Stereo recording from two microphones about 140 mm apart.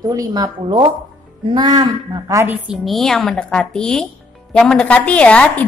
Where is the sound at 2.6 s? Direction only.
5° right (ahead or behind).